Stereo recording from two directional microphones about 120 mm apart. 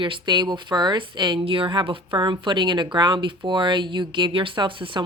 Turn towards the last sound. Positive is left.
turn(degrees=-45)  # may be behind; listen again after turning